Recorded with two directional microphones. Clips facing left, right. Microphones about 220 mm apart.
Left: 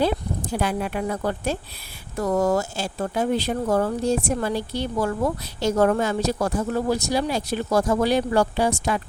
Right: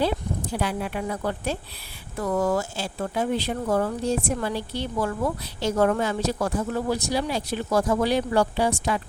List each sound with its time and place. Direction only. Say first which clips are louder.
0.5 s speech: left 3 dB; 45° left (ahead or behind)